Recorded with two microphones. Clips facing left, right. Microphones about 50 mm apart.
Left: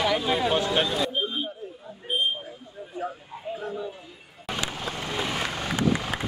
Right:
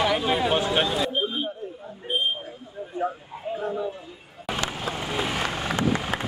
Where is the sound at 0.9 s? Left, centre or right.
Centre.